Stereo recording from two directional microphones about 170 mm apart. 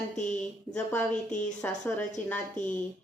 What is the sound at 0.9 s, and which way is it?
Speech, 5° left (ahead or behind).